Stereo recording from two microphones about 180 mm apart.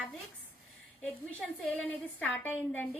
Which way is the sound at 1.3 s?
5° left (ahead or behind).